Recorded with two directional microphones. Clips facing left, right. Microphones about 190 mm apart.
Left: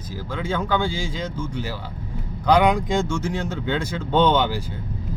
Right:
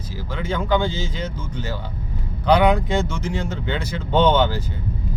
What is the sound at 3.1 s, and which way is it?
Speech, 15° right (ahead or behind).